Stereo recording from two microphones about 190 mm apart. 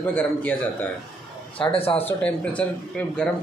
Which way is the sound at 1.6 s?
30° left (ahead or behind).